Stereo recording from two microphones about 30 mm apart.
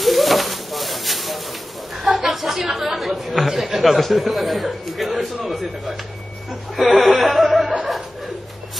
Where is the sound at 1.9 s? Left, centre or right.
Centre.